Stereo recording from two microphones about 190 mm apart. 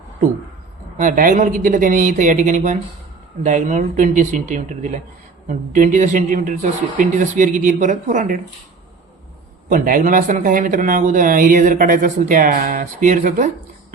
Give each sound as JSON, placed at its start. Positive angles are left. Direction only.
{"t": 0.9, "sound": "speech", "side_deg": -45}
{"t": 9.6, "sound": "speech", "side_deg": -45}